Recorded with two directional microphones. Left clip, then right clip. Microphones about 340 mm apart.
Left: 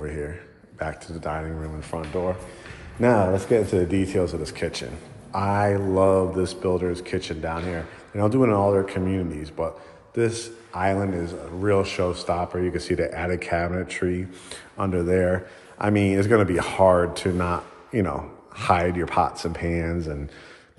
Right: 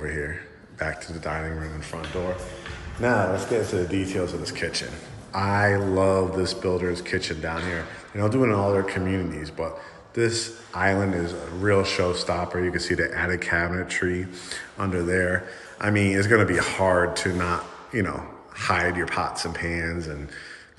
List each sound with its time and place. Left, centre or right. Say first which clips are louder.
0.0 s a man's voice: right 2 dB; centre
3.0 s speech: left 3 dB; left